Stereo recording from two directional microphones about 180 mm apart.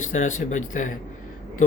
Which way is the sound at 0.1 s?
40° left (ahead or behind).